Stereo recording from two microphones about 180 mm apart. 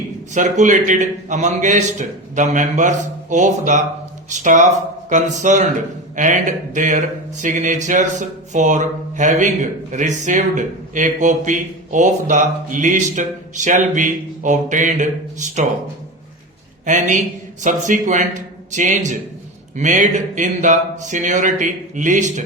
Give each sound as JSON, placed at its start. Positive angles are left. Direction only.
{"t": 0.3, "sound": "speech", "side_deg": -45}
{"t": 16.8, "sound": "speech", "side_deg": -45}